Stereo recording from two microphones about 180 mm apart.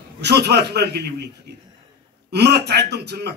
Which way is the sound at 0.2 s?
65° right (ahead or behind).